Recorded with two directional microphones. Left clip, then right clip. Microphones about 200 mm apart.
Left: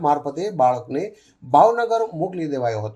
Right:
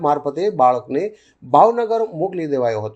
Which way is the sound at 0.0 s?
30° right (ahead or behind).